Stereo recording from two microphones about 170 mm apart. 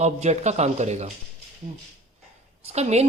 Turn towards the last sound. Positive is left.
turn(degrees=-40)  # may be behind; listen again after turning